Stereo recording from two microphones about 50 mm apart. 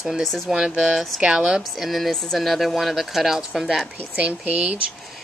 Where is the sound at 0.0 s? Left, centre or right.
Centre.